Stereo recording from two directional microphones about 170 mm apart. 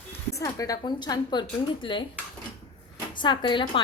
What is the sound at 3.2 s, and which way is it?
Speech, 25° left (ahead or behind).